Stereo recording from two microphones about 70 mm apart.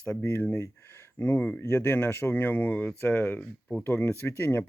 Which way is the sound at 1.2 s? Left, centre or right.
Left.